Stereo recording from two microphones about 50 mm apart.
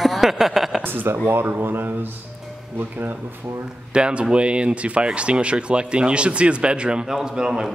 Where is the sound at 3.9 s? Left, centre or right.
Right.